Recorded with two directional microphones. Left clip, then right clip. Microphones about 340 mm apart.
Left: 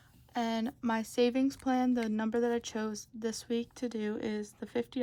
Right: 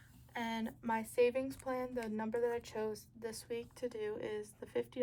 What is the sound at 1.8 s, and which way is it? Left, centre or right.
Speech, left.